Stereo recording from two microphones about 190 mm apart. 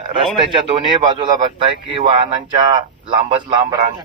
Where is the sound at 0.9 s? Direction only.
25° right (ahead or behind).